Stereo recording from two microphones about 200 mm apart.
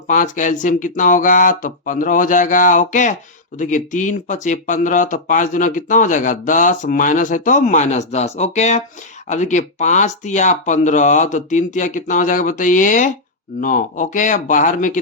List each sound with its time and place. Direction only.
0.1 s speech: 40° left (ahead or behind)